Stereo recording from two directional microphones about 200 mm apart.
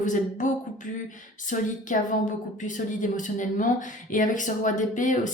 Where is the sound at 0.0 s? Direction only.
40° left (ahead or behind).